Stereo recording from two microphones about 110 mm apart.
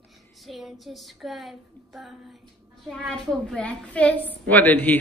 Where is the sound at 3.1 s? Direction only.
5° left (ahead or behind).